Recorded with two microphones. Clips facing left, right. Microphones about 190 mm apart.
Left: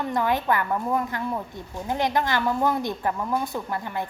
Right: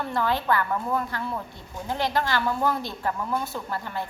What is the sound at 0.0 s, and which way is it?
A woman's voice, 15° left (ahead or behind).